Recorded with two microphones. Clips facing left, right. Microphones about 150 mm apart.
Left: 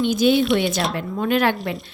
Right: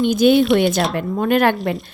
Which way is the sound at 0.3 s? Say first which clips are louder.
Right 4 dB; centre (ahead or behind).